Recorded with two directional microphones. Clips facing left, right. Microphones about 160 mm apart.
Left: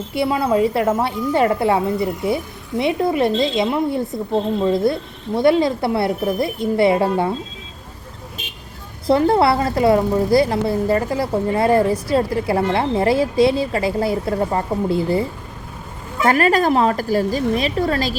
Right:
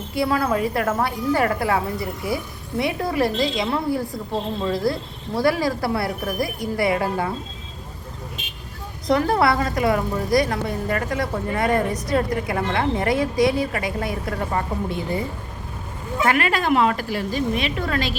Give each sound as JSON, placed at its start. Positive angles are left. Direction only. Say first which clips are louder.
{"t": 0.1, "sound": "a woman's voice", "louder": "left 3 dB", "side_deg": 25}
{"t": 9.0, "sound": "a woman's voice", "louder": "left 4 dB", "side_deg": 25}
{"t": 16.2, "sound": "a woman's voice", "louder": "left 5 dB", "side_deg": 40}